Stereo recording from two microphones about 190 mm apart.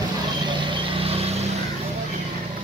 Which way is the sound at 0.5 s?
25° right (ahead or behind).